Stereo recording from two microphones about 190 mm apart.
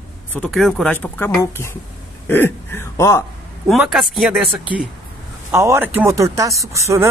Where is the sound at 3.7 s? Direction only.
Centre (ahead or behind).